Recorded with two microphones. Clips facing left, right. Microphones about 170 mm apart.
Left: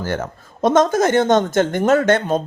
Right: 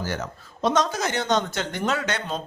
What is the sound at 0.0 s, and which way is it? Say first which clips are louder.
Speech: left 6 dB; 50° left (ahead or behind).